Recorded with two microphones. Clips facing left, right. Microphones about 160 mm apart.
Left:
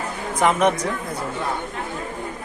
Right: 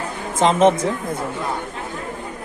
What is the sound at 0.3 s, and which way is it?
Speech, 25° right (ahead or behind).